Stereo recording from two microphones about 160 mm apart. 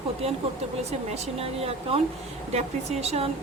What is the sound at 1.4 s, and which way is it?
Speech, 35° right (ahead or behind).